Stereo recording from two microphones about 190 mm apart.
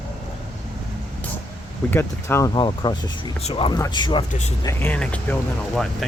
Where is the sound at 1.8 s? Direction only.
10° left (ahead or behind); by 3.7 s 30° left (ahead or behind).